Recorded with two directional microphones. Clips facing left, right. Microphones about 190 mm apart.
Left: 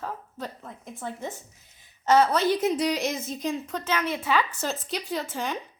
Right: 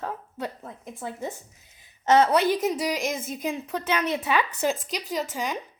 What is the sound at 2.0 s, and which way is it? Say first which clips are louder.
A woman's voice: right 1 dB; 20° right (ahead or behind).